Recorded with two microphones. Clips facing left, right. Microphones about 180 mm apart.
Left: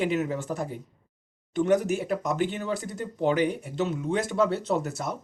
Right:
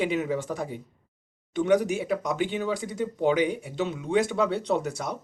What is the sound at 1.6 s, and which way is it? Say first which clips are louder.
Speech: even; centre (ahead or behind).